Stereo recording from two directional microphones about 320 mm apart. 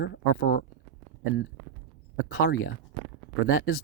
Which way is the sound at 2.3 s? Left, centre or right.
Left.